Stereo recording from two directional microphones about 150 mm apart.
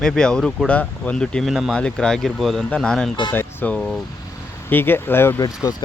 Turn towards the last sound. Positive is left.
turn(degrees=25)  # may be behind; listen again after turning